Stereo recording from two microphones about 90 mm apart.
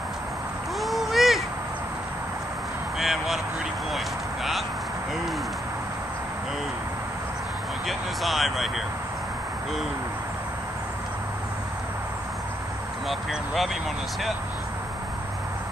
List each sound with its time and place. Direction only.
0.7 s a sound: centre (ahead or behind)
3.0 s speech: centre (ahead or behind)
7.8 s speech: centre (ahead or behind)
13.1 s speech: centre (ahead or behind)